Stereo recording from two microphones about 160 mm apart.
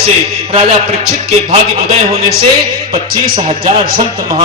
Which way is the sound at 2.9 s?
65° right (ahead or behind).